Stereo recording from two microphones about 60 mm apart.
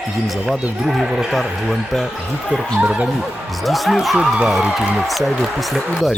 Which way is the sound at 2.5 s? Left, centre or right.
Centre.